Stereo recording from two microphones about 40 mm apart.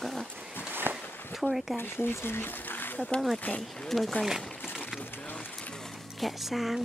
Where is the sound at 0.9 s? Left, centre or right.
Right.